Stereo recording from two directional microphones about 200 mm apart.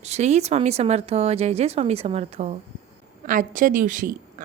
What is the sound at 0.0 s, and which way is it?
Speech, 35° right (ahead or behind).